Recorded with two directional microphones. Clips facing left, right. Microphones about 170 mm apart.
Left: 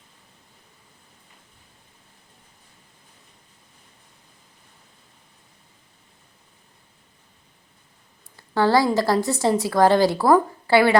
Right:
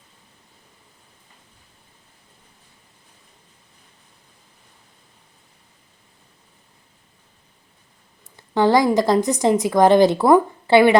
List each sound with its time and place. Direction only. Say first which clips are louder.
8.5 s a woman's voice: right 3 dB; 20° right (ahead or behind)